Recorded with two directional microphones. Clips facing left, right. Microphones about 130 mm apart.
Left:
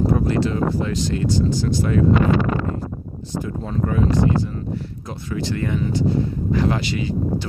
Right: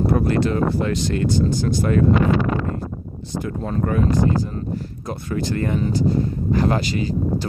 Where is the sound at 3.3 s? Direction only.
60° right (ahead or behind).